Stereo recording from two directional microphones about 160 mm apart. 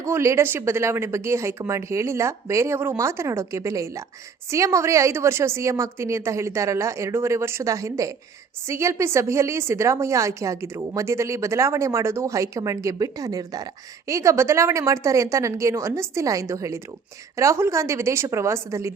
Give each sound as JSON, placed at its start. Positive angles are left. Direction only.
{"t": 0.0, "sound": "a woman's voice", "side_deg": -20}